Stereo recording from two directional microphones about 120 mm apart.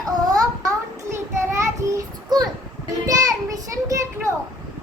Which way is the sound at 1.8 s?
25° right (ahead or behind).